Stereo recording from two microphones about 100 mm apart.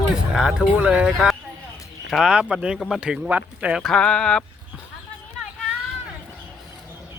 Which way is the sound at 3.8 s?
5° left (ahead or behind).